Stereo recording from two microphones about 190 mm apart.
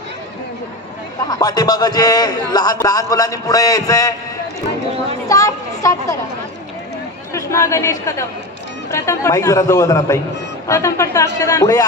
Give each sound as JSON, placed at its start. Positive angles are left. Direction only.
{"t": 1.3, "sound": "a man's voice", "side_deg": 20}
{"t": 5.3, "sound": "a man's voice", "side_deg": 20}
{"t": 7.3, "sound": "a man's voice", "side_deg": 15}